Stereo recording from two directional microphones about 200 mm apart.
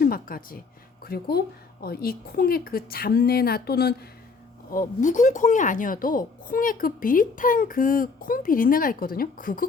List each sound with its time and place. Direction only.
0.0 s speech: 45° left (ahead or behind)
4.7 s speech: 40° left (ahead or behind)